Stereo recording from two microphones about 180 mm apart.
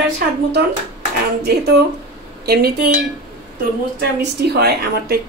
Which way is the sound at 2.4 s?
60° right (ahead or behind).